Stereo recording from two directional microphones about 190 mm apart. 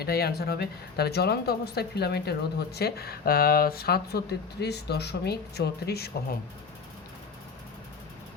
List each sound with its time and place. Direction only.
0.0 s a woman's voice: 55° left (ahead or behind)